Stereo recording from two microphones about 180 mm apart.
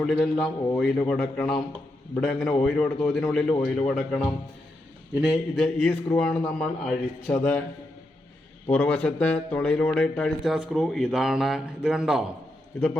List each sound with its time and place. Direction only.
0.0 s speech: centre (ahead or behind)
5.6 s a man's voice: 5° left (ahead or behind)
8.7 s speech: 5° left (ahead or behind)